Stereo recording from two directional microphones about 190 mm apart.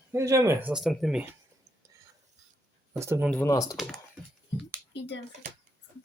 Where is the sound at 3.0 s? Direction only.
15° right (ahead or behind).